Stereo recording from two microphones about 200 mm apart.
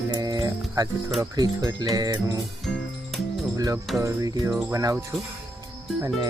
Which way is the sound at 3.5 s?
15° right (ahead or behind).